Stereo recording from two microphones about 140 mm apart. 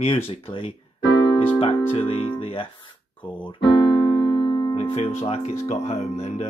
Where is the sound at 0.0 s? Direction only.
40° left (ahead or behind).